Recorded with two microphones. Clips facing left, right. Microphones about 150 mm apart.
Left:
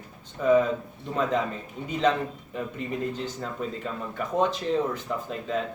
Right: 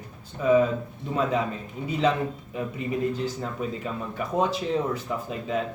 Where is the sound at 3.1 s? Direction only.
10° right (ahead or behind).